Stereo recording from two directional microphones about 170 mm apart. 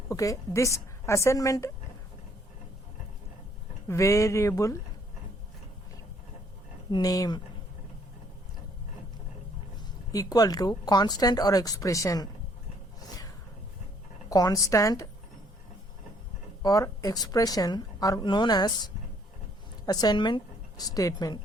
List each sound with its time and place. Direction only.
0.1 s a woman's voice: 20° left (ahead or behind)
3.8 s a woman's voice: 15° left (ahead or behind)
6.9 s speech: 20° left (ahead or behind)
10.1 s speech: 20° left (ahead or behind)
13.0 s a sound: 20° left (ahead or behind)
14.3 s speech: 20° left (ahead or behind)
16.6 s a woman's voice: 20° left (ahead or behind)